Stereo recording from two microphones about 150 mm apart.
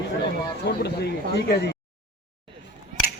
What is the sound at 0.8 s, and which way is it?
Speech, 90° left.